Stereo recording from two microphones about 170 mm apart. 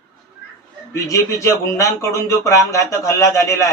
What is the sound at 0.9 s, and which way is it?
Speech, 20° left (ahead or behind).